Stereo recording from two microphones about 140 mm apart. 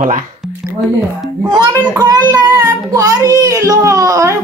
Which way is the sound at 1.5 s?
30° right (ahead or behind).